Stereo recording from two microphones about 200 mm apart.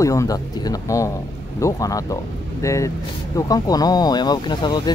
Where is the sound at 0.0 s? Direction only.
15° left (ahead or behind).